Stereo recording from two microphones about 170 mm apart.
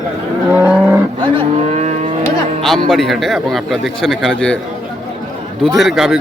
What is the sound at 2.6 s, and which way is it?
A man's voice, 5° left (ahead or behind).